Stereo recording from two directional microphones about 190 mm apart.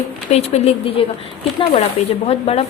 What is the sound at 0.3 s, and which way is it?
Speech, 35° left (ahead or behind).